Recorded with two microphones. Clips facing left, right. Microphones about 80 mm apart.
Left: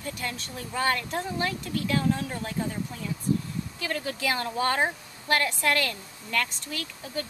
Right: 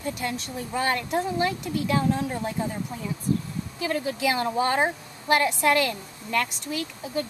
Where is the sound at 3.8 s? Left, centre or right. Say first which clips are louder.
Right 5 dB; centre.